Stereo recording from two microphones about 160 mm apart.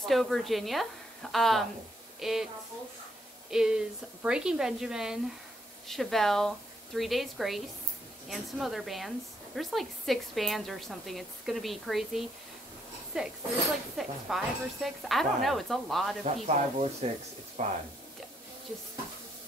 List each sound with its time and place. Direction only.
0.0 s speech: centre (ahead or behind)
3.4 s speech: 5° right (ahead or behind)
16.4 s speech: 45° right (ahead or behind)